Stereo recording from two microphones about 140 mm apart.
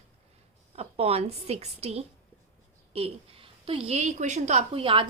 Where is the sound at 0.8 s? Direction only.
45° right (ahead or behind).